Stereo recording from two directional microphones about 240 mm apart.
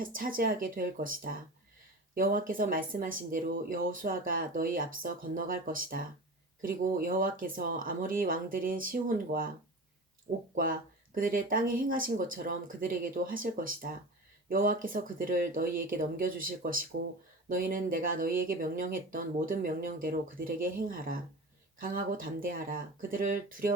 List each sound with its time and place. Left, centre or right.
0.0 s speech: right
10.5 s speech: right